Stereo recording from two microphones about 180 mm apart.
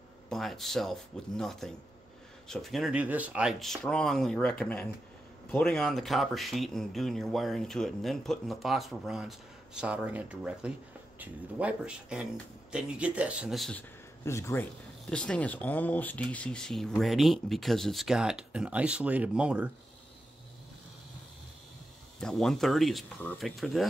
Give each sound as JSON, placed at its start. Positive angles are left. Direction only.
{"t": 0.3, "sound": "speech", "side_deg": 0}
{"t": 14.2, "sound": "speech", "side_deg": 15}
{"t": 22.2, "sound": "speech", "side_deg": 5}